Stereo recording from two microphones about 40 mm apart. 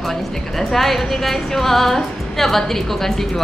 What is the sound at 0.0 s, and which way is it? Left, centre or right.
A woman's voice, centre.